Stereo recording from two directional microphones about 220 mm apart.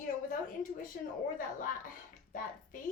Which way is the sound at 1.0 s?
40° left (ahead or behind).